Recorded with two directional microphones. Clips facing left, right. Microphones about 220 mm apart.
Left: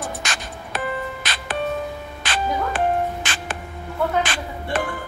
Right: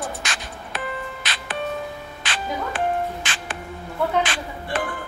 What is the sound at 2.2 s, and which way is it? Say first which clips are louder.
Music: left 4 dB; 40° left (ahead or behind).